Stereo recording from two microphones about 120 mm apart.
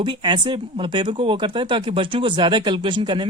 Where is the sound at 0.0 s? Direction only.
40° right (ahead or behind).